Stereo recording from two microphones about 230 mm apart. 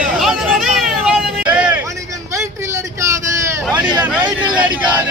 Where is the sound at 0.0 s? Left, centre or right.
Centre.